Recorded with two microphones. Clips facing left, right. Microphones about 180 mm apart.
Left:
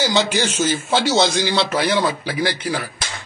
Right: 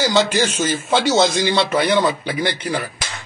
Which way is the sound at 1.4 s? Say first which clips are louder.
Right 2 dB; 10° left (ahead or behind).